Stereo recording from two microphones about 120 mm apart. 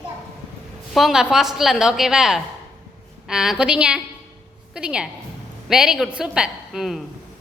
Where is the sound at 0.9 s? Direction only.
Centre (ahead or behind).